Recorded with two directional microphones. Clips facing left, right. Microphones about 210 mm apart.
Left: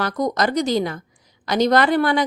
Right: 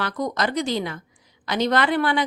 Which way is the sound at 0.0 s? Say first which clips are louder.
Left 4 dB; 40° left (ahead or behind).